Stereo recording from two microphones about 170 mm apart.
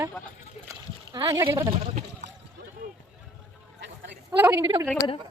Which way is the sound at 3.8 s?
90° right.